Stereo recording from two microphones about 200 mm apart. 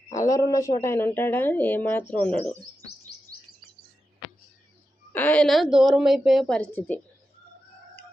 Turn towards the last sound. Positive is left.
turn(degrees=5)  # may be behind; listen again after turning